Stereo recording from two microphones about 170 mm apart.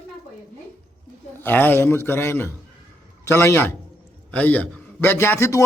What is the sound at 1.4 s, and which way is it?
A man's voice, 10° left (ahead or behind).